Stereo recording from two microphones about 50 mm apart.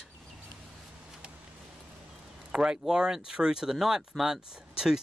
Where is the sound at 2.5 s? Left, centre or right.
Centre.